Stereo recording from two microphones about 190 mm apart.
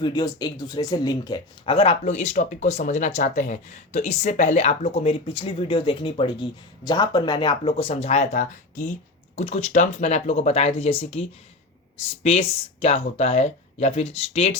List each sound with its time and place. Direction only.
0.0 s speech: 20° left (ahead or behind)